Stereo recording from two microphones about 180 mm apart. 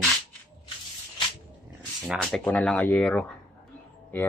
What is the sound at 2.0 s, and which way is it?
Speech, centre (ahead or behind).